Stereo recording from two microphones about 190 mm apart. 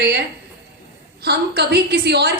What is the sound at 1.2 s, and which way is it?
A woman's voice, 55° right (ahead or behind).